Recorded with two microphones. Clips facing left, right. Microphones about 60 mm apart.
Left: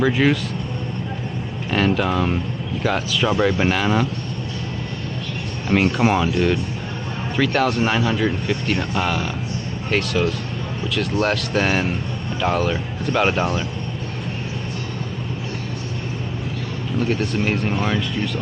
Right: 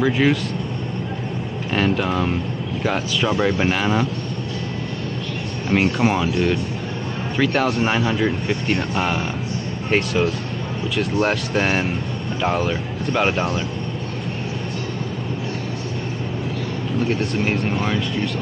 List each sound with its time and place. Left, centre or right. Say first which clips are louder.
0.0 s speech: even; centre
1.7 s speech: left 1 dB; centre
5.7 s speech: left 1 dB; centre
9.8 s speech: right 1 dB; centre
17.0 s speech: even; centre